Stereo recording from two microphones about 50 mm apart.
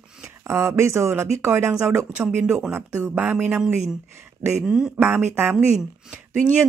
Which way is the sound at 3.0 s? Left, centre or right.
Right.